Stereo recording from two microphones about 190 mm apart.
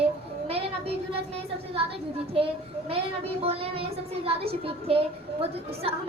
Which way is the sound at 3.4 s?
30° right (ahead or behind).